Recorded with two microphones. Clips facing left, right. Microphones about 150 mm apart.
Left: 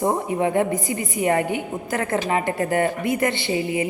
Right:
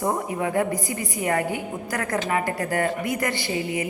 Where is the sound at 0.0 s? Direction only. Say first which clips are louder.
Left 4 dB; 25° left (ahead or behind).